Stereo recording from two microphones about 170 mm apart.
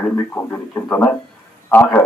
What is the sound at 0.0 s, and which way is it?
A man's voice, 10° left (ahead or behind).